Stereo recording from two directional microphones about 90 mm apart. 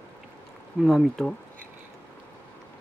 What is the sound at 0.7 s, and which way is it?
Speech, 5° right (ahead or behind).